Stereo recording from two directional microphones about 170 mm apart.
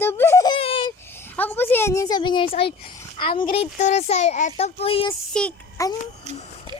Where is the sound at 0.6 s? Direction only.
30° left (ahead or behind).